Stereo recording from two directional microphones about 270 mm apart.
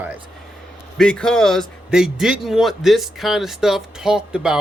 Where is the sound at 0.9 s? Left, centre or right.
Centre.